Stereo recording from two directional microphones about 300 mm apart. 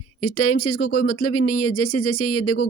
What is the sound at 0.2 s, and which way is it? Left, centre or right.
Speech, left.